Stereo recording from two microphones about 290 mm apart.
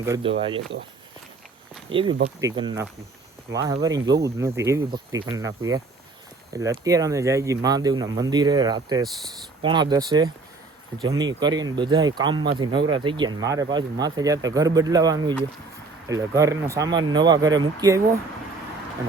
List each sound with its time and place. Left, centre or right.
0.0 s speech: centre
1.9 s speech: centre